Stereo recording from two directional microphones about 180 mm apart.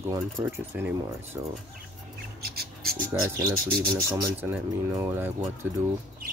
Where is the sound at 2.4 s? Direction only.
60° right (ahead or behind).